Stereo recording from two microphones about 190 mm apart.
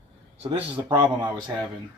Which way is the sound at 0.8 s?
15° right (ahead or behind).